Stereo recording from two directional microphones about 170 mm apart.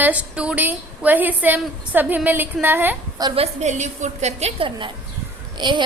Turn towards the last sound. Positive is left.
turn(degrees=-25)  # may be behind; listen again after turning